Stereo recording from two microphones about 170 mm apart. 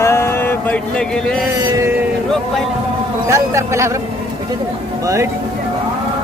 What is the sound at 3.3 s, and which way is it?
Speech, 15° right (ahead or behind).